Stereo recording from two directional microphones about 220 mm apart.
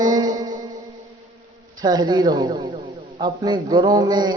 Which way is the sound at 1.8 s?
20° right (ahead or behind).